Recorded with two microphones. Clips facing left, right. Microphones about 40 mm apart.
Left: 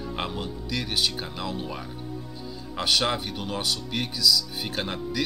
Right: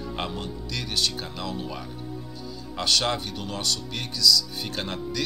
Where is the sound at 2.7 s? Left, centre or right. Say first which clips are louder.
Even; centre.